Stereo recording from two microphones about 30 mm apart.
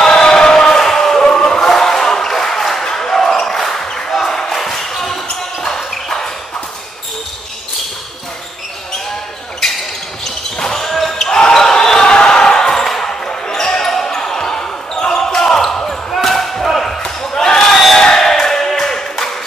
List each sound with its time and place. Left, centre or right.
0.1 s a sound: left
1.3 s chant: left
1.6 s a sound: centre
2.8 s basketball bounce: centre
5.9 s clip-clop: centre
10.6 s basketball bounce: centre
11.2 s basketball bounce: left
16.1 s slam: centre
17.4 s a sound: centre